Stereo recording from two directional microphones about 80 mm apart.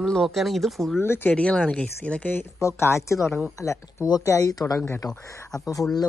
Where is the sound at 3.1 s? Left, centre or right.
Centre.